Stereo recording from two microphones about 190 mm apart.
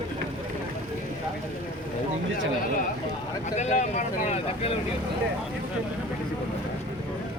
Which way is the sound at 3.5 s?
40° left (ahead or behind).